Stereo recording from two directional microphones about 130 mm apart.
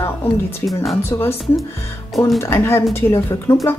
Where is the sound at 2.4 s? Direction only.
20° left (ahead or behind).